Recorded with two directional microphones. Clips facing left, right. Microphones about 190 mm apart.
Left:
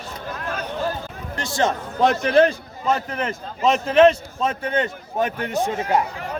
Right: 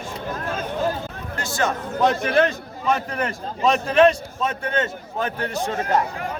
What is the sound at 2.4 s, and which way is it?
A man's voice, 20° left (ahead or behind).